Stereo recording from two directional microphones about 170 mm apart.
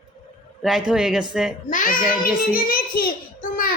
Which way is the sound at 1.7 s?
50° left (ahead or behind).